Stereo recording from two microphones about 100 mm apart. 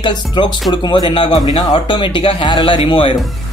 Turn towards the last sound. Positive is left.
turn(degrees=60)  # may be behind; listen again after turning